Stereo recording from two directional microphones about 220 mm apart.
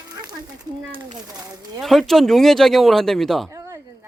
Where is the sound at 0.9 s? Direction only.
20° right (ahead or behind).